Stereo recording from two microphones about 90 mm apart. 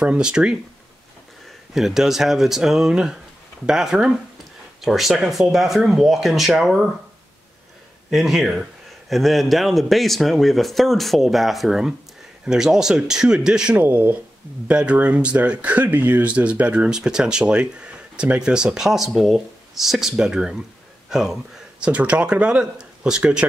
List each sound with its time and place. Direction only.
0.0 s speech: 10° right (ahead or behind)
1.7 s a man's voice: 5° right (ahead or behind)
8.1 s a man's voice: 5° right (ahead or behind)
13.7 s speech: 20° right (ahead or behind)